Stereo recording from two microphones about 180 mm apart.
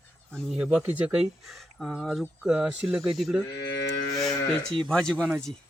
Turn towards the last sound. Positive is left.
turn(degrees=5)  # may be behind; listen again after turning